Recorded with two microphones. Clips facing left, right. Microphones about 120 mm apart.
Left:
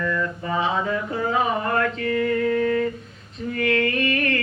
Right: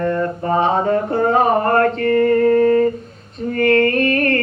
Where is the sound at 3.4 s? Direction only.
45° right (ahead or behind).